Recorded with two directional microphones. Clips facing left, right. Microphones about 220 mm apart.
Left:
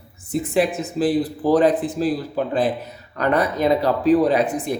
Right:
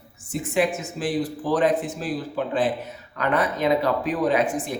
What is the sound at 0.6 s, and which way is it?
Speech, 35° left (ahead or behind).